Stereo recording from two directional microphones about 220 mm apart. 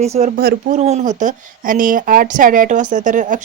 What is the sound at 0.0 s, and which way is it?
Speech, 30° right (ahead or behind).